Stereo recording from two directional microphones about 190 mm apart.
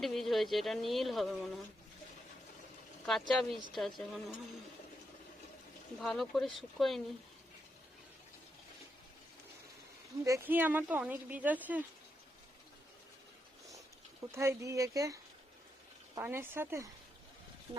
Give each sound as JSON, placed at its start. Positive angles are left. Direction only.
{"t": 0.0, "sound": "speech", "side_deg": 0}
{"t": 3.1, "sound": "speech", "side_deg": 0}
{"t": 6.0, "sound": "speech", "side_deg": 0}
{"t": 10.2, "sound": "speech", "side_deg": -15}
{"t": 14.3, "sound": "speech", "side_deg": -15}